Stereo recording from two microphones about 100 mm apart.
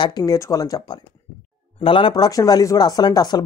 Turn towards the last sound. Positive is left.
turn(degrees=40)  # may be behind; listen again after turning